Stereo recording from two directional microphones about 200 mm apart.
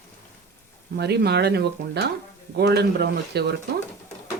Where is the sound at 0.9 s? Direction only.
55° right (ahead or behind).